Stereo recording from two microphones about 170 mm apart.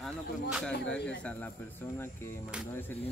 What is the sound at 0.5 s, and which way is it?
Speech, centre (ahead or behind).